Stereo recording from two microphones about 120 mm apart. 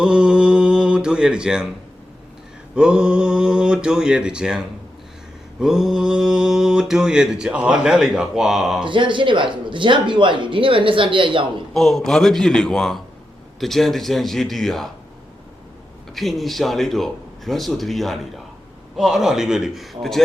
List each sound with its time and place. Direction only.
0.0 s speech: 10° right (ahead or behind)
2.7 s speech: 5° right (ahead or behind)
5.5 s mantra: 5° right (ahead or behind)
8.8 s speech: 45° right (ahead or behind)
11.7 s mantra: centre (ahead or behind)
16.1 s mantra: centre (ahead or behind)